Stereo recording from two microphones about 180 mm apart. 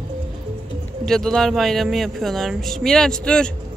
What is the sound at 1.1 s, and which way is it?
Speech, 5° left (ahead or behind).